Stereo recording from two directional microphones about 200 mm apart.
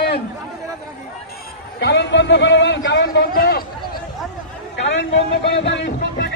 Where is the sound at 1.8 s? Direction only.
60° left (ahead or behind).